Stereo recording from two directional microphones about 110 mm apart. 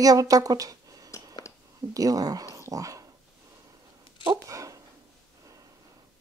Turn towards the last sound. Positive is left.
turn(degrees=-30)  # may be behind; listen again after turning